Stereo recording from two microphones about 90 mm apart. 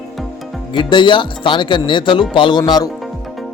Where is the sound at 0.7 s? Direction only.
60° left (ahead or behind).